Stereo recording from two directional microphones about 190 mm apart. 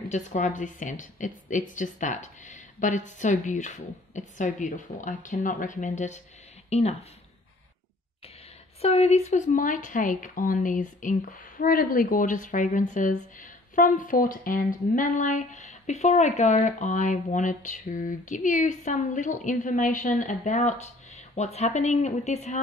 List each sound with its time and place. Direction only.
0.1 s a woman's voice: 40° left (ahead or behind)
8.8 s a woman's voice: 35° left (ahead or behind)